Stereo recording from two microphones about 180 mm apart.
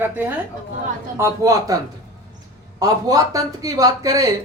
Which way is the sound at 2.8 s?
20° right (ahead or behind).